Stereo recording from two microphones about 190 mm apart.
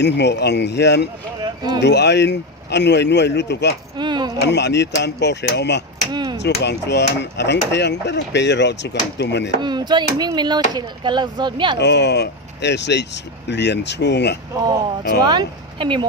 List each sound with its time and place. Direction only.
0.0 s chop: 65° left (ahead or behind)
1.4 s a sound: 20° right (ahead or behind)
1.8 s chop: 65° left (ahead or behind)
3.9 s a sound: 25° right (ahead or behind)
4.4 s chop: 65° left (ahead or behind)
6.1 s a sound: 20° right (ahead or behind)
6.6 s chop: 60° left (ahead or behind)
9.6 s speech: 20° right (ahead or behind)
11.8 s chop: 65° left (ahead or behind)
14.5 s speech: 20° right (ahead or behind)